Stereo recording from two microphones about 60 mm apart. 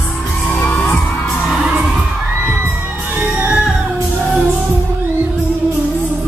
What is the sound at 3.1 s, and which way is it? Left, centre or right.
Music, right.